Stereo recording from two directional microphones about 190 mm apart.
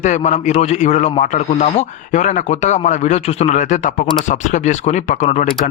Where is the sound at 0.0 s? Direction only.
40° left (ahead or behind).